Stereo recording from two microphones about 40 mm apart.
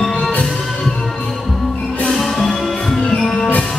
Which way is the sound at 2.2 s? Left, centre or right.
Centre.